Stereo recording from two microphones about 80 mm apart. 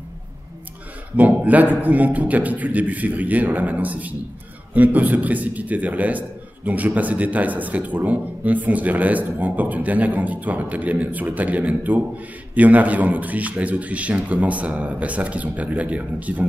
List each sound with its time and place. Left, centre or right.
1.1 s a man's voice: centre